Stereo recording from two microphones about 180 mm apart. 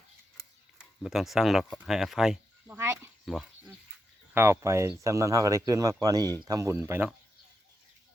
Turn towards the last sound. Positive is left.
turn(degrees=-10)  # may be behind; listen again after turning